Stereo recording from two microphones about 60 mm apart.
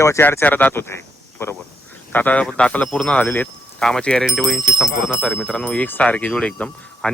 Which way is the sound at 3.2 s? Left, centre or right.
Left.